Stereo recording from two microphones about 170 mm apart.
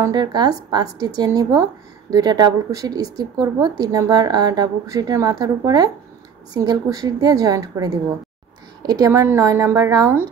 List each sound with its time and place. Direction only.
0.0 s speech: 25° right (ahead or behind)